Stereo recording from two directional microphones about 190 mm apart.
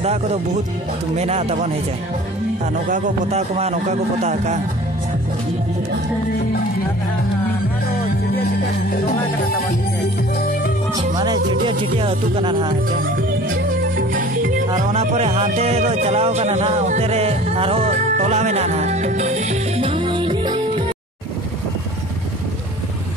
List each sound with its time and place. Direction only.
0.0 s a man's voice: 35° right (ahead or behind)
2.9 s a man's voice: 35° right (ahead or behind)
8.9 s speech: 50° left (ahead or behind)
11.1 s music: 20° right (ahead or behind)
14.9 s speech: 35° right (ahead or behind)